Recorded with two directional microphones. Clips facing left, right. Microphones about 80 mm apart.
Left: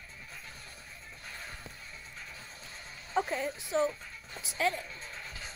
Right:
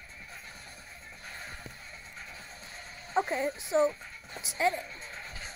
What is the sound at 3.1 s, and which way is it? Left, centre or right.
Speech, right.